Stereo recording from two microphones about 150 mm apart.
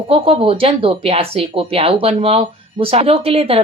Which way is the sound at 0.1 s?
40° right (ahead or behind).